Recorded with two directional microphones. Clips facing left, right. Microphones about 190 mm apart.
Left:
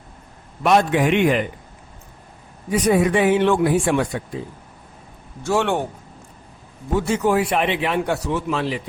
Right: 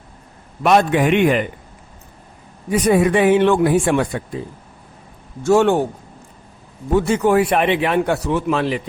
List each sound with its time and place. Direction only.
0.6 s a man's voice: 60° right (ahead or behind)
2.8 s a man's voice: 55° right (ahead or behind)
5.4 s a man's voice: 45° right (ahead or behind)
6.9 s a man's voice: 60° right (ahead or behind)